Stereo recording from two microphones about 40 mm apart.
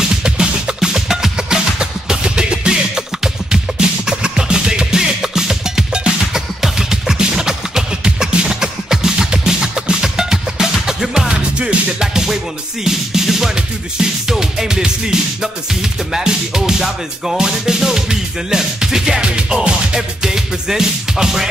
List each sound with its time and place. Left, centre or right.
0.2 s music: centre
8.5 s music: centre
19.3 s music: right